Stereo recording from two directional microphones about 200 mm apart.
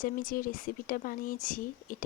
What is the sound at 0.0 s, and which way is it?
Speech, 45° left (ahead or behind).